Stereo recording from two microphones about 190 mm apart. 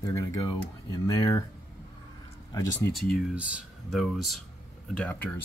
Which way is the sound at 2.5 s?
15° left (ahead or behind).